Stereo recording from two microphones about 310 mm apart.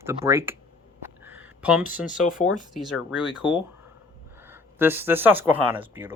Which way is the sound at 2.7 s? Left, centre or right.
Centre.